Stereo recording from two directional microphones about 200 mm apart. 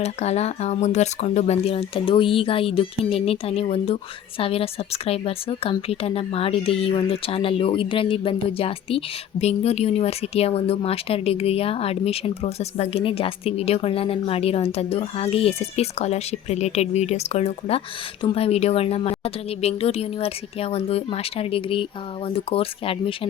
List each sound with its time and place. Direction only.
0.0 s a woman's voice: 35° left (ahead or behind)